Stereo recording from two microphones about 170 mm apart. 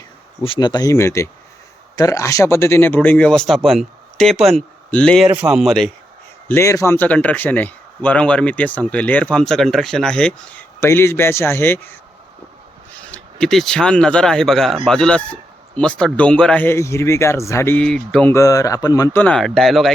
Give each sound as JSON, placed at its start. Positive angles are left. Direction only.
{"t": 0.4, "sound": "speech", "side_deg": 30}
{"t": 6.5, "sound": "speech", "side_deg": 20}
{"t": 13.1, "sound": "speech", "side_deg": 5}
{"t": 18.3, "sound": "speech", "side_deg": 20}